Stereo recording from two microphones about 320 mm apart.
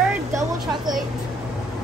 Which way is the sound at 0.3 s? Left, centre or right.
Centre.